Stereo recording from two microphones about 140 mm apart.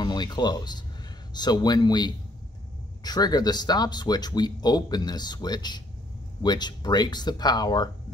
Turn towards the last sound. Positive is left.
turn(degrees=30)  # may be behind; listen again after turning